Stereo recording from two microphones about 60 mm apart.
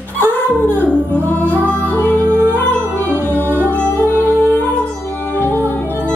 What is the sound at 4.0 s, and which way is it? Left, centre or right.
Music, left.